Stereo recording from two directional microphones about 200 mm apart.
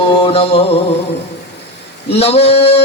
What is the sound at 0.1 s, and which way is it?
Music, 30° left (ahead or behind).